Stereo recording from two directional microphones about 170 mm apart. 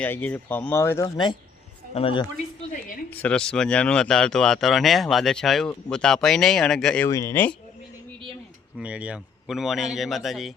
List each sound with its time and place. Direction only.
0.0 s speech: 10° left (ahead or behind)
2.0 s speech: 35° left (ahead or behind)
3.1 s speech: 10° left (ahead or behind)
7.1 s speech: 15° left (ahead or behind)
8.8 s speech: 5° right (ahead or behind)